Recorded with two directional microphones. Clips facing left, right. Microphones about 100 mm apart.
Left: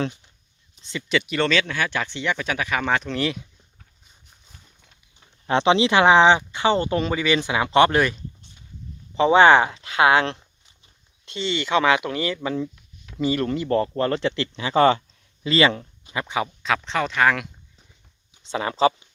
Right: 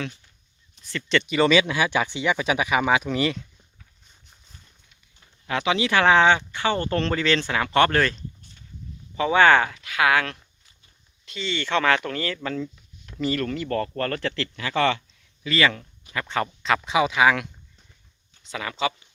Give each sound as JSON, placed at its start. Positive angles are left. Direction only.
{"t": 0.8, "sound": "speech", "side_deg": 20}
{"t": 1.0, "sound": "speech", "side_deg": 5}
{"t": 1.4, "sound": "speech", "side_deg": -10}
{"t": 5.5, "sound": "speech", "side_deg": 30}
{"t": 16.6, "sound": "speech", "side_deg": -5}
{"t": 18.4, "sound": "speech", "side_deg": 30}